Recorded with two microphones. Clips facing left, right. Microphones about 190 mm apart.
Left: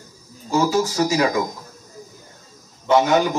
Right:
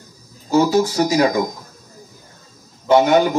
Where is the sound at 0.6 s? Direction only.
35° right (ahead or behind).